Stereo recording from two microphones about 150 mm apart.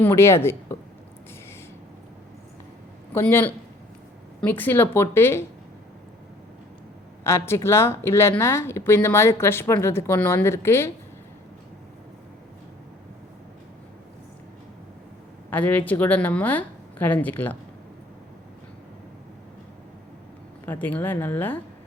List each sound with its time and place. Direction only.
0.0 s a woman's voice: 15° left (ahead or behind)
3.1 s speech: 15° left (ahead or behind)
7.3 s speech: 15° left (ahead or behind)
15.4 s speech: 10° left (ahead or behind)
20.7 s speech: 10° left (ahead or behind)